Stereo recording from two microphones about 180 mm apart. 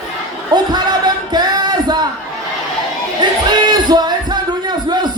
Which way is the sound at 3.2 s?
20° right (ahead or behind).